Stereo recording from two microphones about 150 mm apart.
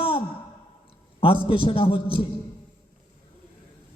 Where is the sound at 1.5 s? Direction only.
35° left (ahead or behind).